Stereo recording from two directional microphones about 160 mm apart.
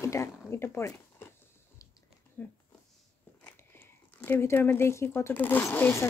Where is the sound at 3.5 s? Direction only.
15° left (ahead or behind).